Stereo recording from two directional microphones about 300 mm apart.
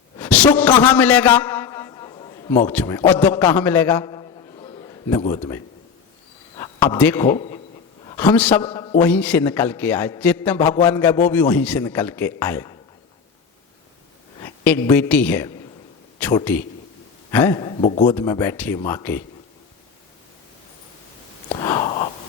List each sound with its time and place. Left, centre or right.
0.2 s a sound: centre
2.6 s a man's voice: centre
6.6 s a man's voice: centre
8.6 s a man's voice: centre
9.0 s a man's voice: centre
14.4 s a man's voice: centre
18.1 s a man's voice: centre
21.5 s a sound: centre